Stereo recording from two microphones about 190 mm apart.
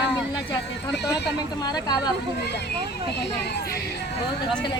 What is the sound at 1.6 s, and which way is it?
Speech, 20° left (ahead or behind).